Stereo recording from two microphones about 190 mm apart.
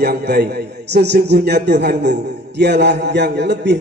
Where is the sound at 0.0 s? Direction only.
55° right (ahead or behind).